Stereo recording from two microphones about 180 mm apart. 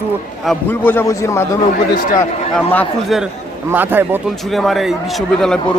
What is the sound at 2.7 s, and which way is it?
Speech, 10° left (ahead or behind).